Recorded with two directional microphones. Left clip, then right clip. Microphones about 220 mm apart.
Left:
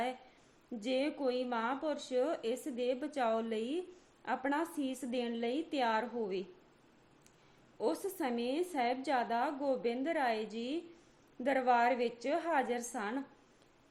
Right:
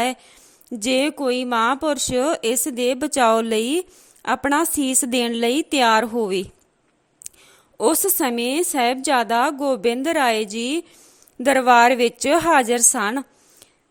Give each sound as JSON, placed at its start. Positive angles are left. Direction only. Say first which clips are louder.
{"t": 0.8, "sound": "speech", "louder": "right 14 dB", "side_deg": -50}
{"t": 7.8, "sound": "speech", "louder": "right 16 dB", "side_deg": -50}